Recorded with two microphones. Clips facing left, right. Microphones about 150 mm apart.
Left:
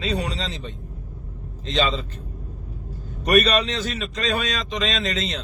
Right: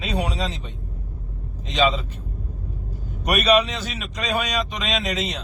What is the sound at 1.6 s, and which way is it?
Speech, 10° right (ahead or behind).